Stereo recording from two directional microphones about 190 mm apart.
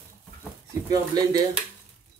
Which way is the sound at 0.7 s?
20° right (ahead or behind).